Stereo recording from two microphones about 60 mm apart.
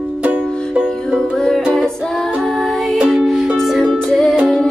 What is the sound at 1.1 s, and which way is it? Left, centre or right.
Music, centre.